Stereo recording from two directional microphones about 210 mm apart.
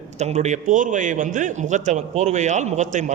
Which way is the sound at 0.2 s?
35° right (ahead or behind).